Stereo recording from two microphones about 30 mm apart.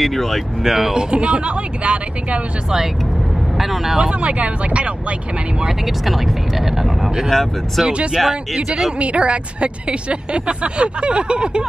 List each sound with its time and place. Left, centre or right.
0.0 s speech: centre
0.9 s speech: right
3.5 s speech: centre
4.0 s speech: right
5.7 s speech: centre
7.2 s speech: centre
9.0 s speech: right